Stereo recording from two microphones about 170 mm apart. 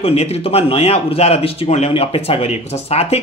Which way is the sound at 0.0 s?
40° left (ahead or behind).